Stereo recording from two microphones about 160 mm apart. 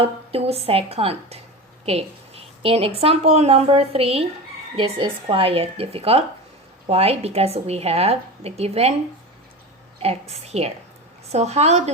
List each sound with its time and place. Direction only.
0.0 s a woman's voice: 35° right (ahead or behind)
10.0 s a woman's voice: 40° right (ahead or behind)